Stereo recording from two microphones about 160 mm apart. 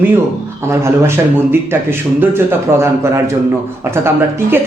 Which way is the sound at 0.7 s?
15° right (ahead or behind).